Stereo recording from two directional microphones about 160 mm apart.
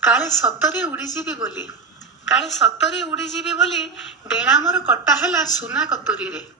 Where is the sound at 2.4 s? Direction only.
Centre (ahead or behind).